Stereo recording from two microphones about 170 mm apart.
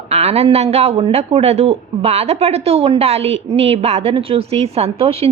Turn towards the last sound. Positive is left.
turn(degrees=-35)  # may be behind; listen again after turning